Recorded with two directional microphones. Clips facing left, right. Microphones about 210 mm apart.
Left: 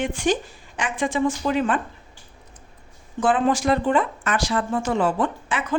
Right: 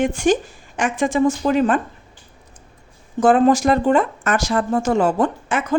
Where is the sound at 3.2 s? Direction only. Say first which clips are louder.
Right 6 dB; 45° right (ahead or behind).